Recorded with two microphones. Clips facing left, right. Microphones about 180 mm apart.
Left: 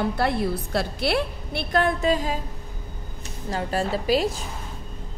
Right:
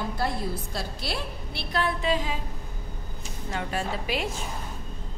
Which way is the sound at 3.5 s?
35° left (ahead or behind).